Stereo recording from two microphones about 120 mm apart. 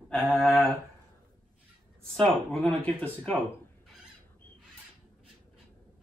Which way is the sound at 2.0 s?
5° left (ahead or behind).